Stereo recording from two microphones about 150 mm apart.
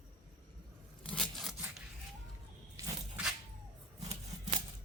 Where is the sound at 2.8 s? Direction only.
20° right (ahead or behind).